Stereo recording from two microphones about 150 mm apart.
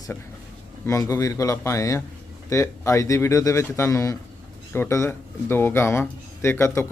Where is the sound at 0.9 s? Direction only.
20° left (ahead or behind).